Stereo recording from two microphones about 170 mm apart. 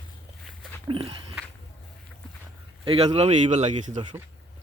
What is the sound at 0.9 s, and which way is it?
Speech, 30° right (ahead or behind).